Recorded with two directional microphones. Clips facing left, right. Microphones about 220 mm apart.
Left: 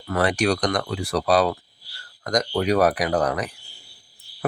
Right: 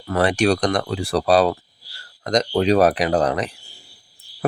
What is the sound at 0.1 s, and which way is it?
Speech, 25° right (ahead or behind).